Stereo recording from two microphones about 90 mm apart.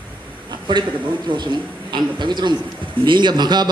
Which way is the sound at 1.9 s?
55° right (ahead or behind).